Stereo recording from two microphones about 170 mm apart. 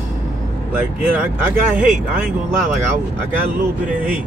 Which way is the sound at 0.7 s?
10° right (ahead or behind).